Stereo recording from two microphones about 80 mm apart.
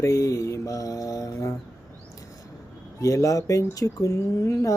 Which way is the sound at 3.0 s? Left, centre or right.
Left.